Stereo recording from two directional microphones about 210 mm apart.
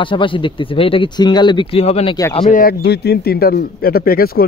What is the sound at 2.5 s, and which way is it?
A man's voice, 45° left (ahead or behind).